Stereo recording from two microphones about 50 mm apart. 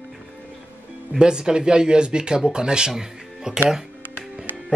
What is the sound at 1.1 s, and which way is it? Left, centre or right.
Speech, centre.